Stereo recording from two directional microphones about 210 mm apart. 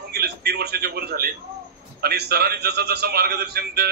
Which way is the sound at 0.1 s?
50° right (ahead or behind).